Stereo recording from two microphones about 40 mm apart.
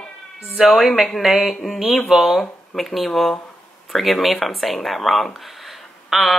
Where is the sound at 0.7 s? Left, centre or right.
Centre.